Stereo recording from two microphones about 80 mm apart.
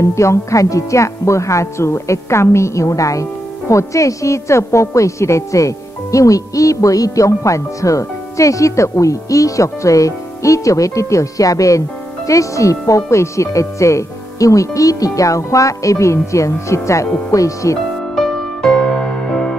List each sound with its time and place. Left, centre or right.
0.0 s speech: left
18.1 s music: centre